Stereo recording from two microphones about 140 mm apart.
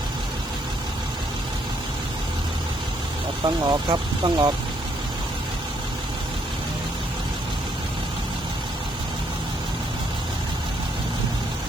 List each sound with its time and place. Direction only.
3.4 s speech: 30° right (ahead or behind)